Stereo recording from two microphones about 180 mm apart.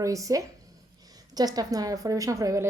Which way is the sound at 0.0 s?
20° right (ahead or behind).